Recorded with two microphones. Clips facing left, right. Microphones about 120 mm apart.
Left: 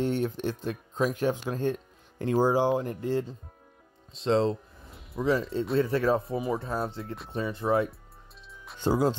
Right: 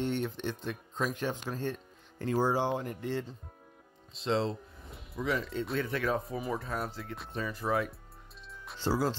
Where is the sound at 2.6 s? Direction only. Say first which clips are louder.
Left 6 dB; 40° left (ahead or behind).